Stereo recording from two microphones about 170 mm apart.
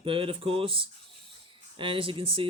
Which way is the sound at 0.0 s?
30° right (ahead or behind).